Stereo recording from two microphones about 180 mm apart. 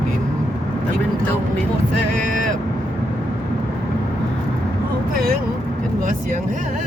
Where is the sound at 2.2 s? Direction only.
45° right (ahead or behind).